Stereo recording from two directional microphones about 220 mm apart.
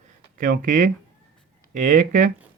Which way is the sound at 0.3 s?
40° right (ahead or behind).